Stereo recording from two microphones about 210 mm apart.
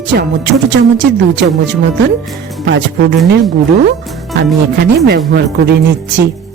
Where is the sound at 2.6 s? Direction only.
55° right (ahead or behind).